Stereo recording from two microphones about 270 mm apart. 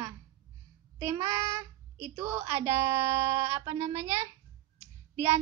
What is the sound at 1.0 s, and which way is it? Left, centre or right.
A child's voice, centre.